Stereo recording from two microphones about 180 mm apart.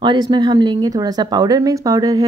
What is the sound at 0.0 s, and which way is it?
Speech, 25° right (ahead or behind).